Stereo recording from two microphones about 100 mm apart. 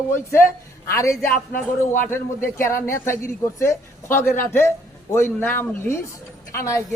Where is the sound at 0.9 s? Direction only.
30° left (ahead or behind).